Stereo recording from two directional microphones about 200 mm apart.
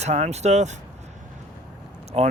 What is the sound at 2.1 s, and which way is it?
Speech, 30° right (ahead or behind).